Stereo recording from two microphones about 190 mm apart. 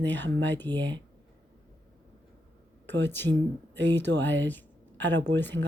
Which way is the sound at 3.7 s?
70° right (ahead or behind).